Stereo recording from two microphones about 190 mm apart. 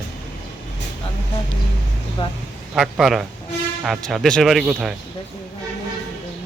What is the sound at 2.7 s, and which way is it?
Speech, centre (ahead or behind).